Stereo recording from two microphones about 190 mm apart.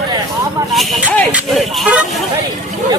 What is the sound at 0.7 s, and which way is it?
Speech, 5° left (ahead or behind).